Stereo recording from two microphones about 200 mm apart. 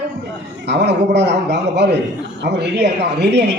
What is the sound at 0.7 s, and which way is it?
Speech, 60° right (ahead or behind).